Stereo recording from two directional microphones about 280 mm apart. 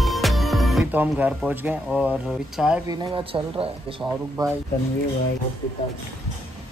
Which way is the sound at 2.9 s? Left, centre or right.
Centre.